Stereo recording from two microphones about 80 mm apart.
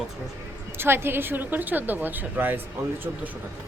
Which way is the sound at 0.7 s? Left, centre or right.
Right.